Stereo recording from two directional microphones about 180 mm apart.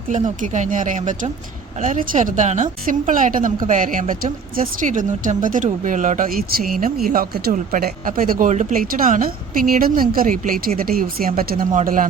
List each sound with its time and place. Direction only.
0.1 s speech: 45° right (ahead or behind)